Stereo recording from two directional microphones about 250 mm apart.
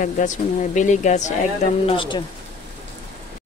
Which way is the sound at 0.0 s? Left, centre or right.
Left.